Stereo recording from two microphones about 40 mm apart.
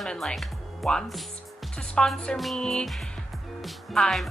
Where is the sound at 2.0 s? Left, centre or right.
Centre.